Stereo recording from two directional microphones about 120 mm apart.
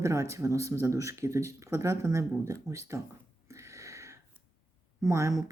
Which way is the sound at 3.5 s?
25° right (ahead or behind).